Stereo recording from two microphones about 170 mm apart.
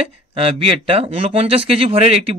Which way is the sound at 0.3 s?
35° right (ahead or behind).